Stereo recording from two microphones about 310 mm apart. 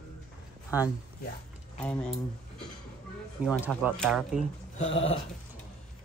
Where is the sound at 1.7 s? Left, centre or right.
Centre.